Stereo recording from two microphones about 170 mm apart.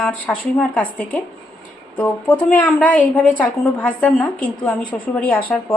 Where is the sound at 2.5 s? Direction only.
5° left (ahead or behind).